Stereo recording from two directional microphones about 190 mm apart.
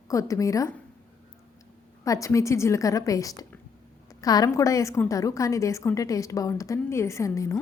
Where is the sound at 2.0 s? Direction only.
15° left (ahead or behind).